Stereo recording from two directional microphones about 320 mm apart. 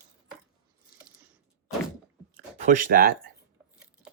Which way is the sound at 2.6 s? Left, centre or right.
Right.